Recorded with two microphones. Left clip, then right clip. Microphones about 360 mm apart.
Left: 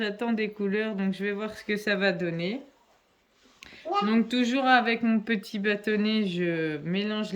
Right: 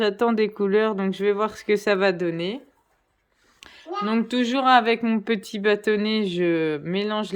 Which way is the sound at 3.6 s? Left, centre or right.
Centre.